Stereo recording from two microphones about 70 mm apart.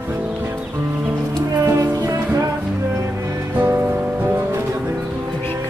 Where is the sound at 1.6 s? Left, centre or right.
Right.